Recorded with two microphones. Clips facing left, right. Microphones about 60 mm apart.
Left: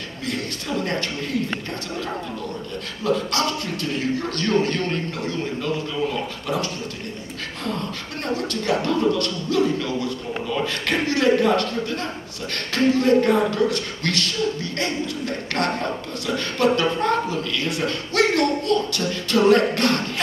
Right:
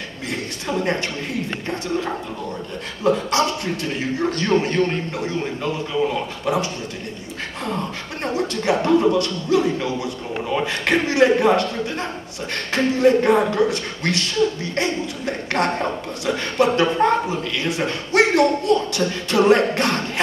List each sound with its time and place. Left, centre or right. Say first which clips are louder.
0.3 s speech: right 1 dB; right
3.0 s speech: right 4 dB; right